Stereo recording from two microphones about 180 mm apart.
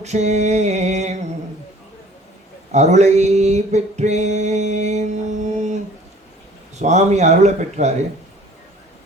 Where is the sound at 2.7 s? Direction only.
40° right (ahead or behind).